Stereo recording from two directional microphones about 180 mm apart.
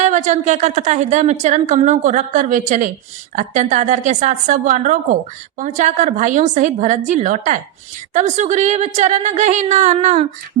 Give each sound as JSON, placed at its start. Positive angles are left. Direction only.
{"t": 0.0, "sound": "a woman's voice", "side_deg": -40}